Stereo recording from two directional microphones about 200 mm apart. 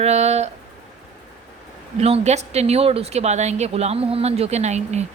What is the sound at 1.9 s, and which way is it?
Speech, 30° right (ahead or behind).